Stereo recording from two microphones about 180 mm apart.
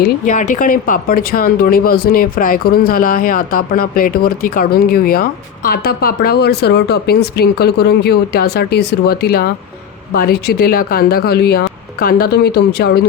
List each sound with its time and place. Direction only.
0.0 s speech: 45° left (ahead or behind); by 13.1 s 60° left (ahead or behind)